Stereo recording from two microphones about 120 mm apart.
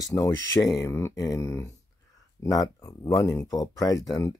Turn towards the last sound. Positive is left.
turn(degrees=30)  # may be behind; listen again after turning